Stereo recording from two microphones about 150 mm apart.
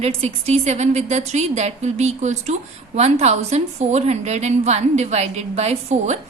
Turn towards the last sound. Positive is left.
turn(degrees=-45)  # may be behind; listen again after turning